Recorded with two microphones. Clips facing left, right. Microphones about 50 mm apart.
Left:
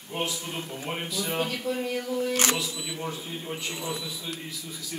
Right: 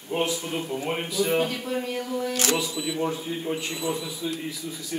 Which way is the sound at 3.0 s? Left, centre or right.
Centre.